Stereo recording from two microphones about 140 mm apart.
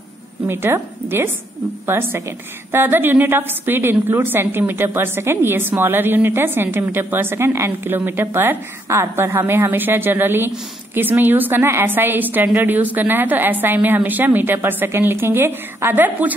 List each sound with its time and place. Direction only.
0.5 s a woman's voice: 15° right (ahead or behind)